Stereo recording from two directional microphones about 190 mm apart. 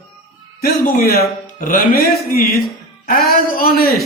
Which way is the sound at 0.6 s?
55° left (ahead or behind).